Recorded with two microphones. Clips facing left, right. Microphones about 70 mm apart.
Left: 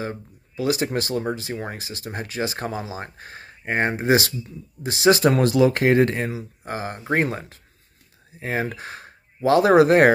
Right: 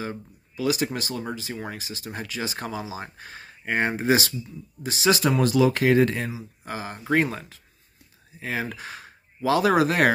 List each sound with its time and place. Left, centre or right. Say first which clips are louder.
0.0 s speech: left 2 dB; left
7.0 s speech: even; left